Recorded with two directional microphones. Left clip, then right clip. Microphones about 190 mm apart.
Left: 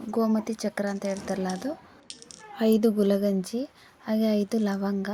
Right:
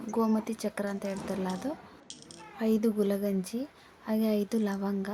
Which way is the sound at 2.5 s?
25° left (ahead or behind).